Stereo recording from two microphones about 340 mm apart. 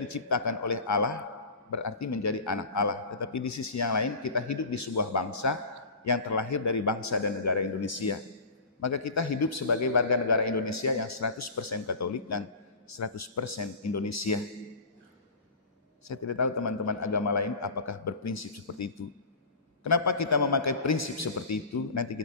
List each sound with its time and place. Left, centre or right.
0.0 s a man's voice: left
16.1 s a man's voice: left